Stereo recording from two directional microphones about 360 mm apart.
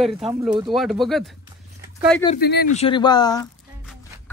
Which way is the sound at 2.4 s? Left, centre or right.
Left.